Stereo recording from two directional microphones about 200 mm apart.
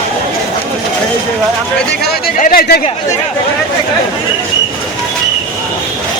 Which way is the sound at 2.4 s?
45° left (ahead or behind).